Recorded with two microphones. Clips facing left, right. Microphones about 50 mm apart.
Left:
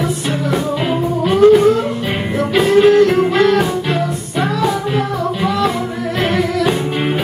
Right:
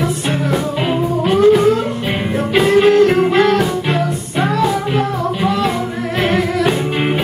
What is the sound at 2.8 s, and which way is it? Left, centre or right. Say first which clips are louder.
Music: left 2 dB; right.